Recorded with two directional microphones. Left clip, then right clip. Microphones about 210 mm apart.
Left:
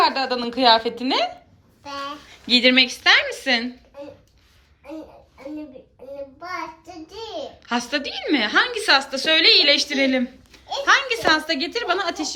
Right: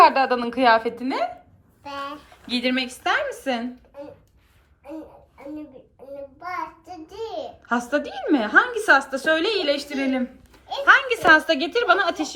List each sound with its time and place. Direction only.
0.0 s a child's voice: 5° left (ahead or behind)
6.4 s a child's voice: centre (ahead or behind)